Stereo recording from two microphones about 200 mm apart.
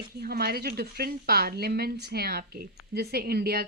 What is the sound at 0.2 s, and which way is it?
A woman's voice, 50° right (ahead or behind).